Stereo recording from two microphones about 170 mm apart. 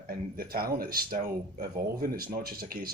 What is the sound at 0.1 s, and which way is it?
Speech, 60° right (ahead or behind).